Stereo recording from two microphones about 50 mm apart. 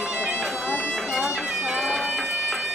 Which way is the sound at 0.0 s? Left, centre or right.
Right.